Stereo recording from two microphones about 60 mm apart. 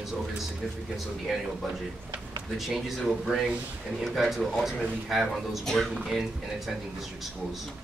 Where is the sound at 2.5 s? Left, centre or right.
Centre.